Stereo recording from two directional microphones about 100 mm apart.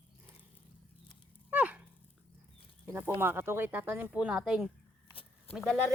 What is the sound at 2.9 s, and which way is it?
Speech, 20° right (ahead or behind).